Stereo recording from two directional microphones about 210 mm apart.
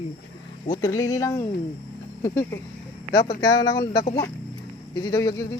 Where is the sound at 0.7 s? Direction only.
15° left (ahead or behind).